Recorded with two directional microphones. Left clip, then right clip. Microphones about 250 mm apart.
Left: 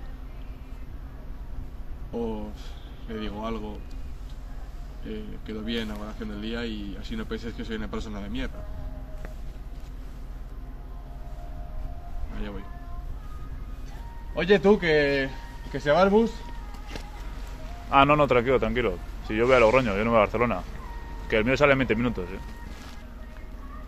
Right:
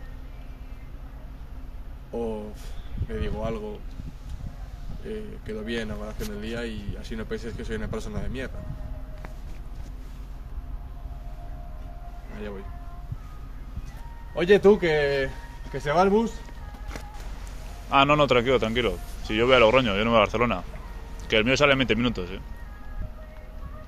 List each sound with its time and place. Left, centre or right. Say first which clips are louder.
3.1 s speech: right 2 dB; right
5.0 s speech: right 3 dB; right
14.3 s speech: right 2 dB; right
17.8 s speech: even; right